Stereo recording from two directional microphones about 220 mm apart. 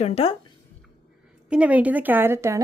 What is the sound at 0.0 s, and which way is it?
Speech, 25° left (ahead or behind).